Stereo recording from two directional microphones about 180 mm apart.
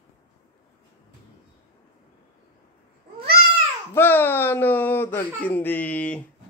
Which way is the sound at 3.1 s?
55° right (ahead or behind).